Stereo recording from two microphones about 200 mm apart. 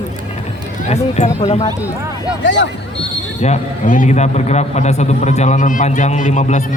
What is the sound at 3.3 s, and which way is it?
A man's voice, 35° left (ahead or behind).